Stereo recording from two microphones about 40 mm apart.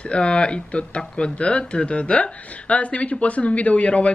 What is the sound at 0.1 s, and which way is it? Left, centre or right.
Speech, left.